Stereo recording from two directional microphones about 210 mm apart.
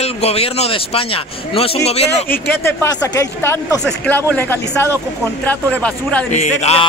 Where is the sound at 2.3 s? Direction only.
10° left (ahead or behind).